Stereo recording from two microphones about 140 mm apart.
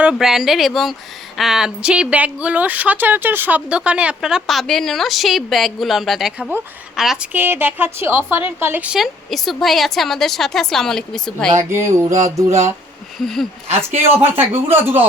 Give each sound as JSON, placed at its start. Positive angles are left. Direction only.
{"t": 0.0, "sound": "speech", "side_deg": -5}
{"t": 7.3, "sound": "speech", "side_deg": -15}
{"t": 11.5, "sound": "speech", "side_deg": -20}
{"t": 13.2, "sound": "speech", "side_deg": 0}
{"t": 14.5, "sound": "speech", "side_deg": -15}